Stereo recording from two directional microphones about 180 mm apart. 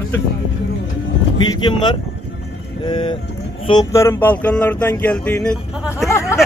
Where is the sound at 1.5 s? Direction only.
25° left (ahead or behind).